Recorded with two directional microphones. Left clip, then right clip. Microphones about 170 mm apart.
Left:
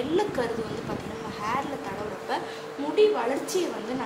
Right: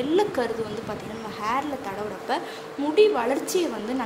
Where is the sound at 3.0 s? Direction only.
70° right (ahead or behind).